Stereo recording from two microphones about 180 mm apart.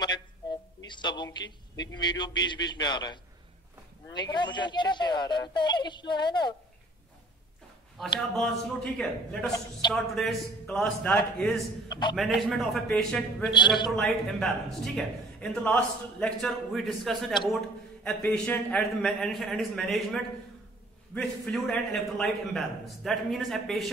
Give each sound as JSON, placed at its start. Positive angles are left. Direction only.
{"t": 0.0, "sound": "a sound", "side_deg": 25}
{"t": 0.8, "sound": "a man's voice", "side_deg": 25}
{"t": 8.9, "sound": "a man's voice", "side_deg": 5}
{"t": 9.5, "sound": "speech", "side_deg": 25}
{"t": 9.9, "sound": "a man's voice", "side_deg": 0}
{"t": 11.9, "sound": "speech", "side_deg": 25}
{"t": 12.2, "sound": "a man's voice", "side_deg": 0}